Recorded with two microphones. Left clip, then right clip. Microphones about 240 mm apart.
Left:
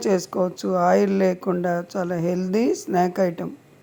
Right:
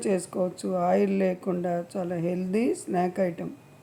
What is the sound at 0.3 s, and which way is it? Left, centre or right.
Speech, centre.